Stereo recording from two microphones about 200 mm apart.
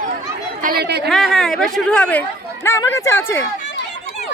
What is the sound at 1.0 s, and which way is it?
Speech, centre (ahead or behind).